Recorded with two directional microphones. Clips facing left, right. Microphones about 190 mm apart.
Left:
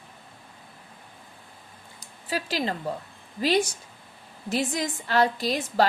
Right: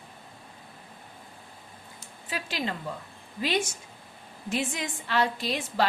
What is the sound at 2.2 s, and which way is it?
A woman's voice, 40° left (ahead or behind).